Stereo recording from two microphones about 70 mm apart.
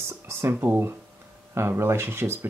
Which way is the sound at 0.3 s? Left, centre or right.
Right.